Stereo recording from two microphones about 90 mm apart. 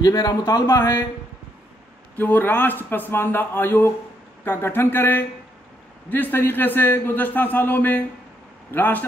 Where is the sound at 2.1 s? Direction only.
20° left (ahead or behind).